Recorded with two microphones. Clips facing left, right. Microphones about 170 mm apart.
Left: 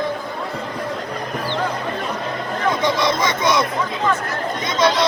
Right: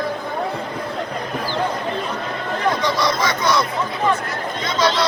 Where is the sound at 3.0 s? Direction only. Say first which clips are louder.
Left 1 dB; 25° left (ahead or behind).